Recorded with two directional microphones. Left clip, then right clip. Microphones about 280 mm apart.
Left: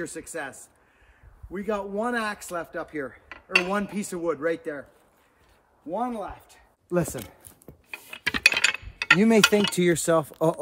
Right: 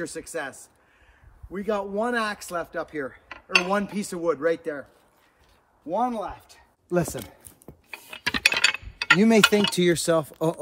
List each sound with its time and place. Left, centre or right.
0.0 s speech: centre
5.9 s speech: centre
6.9 s coin: centre